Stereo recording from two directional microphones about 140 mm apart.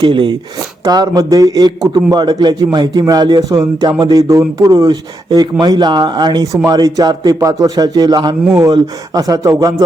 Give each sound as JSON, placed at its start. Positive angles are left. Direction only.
{"t": 0.0, "sound": "a man's voice", "side_deg": -35}